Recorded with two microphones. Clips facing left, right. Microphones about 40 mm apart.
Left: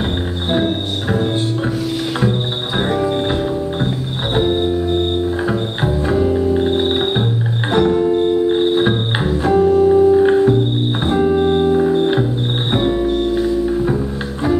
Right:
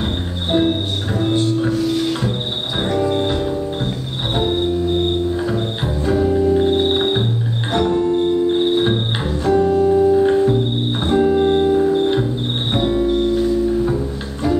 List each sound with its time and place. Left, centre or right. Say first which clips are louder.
0.5 s music: right 2 dB; centre
4.4 s music: left 3 dB; centre
5.3 s music: left 1 dB; left
11.1 s organ: even; centre
12.7 s music: even; centre